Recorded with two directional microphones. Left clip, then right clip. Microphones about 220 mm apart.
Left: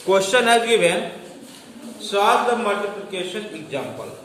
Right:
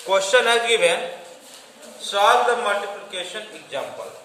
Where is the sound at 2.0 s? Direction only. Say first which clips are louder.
Right 1 dB; 15° right (ahead or behind).